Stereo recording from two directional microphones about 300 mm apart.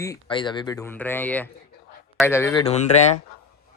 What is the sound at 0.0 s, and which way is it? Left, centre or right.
Speech, centre.